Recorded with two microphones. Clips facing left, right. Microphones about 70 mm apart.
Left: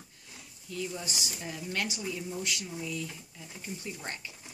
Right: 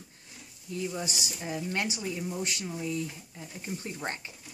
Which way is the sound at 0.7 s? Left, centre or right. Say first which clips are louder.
Right 3 dB; right.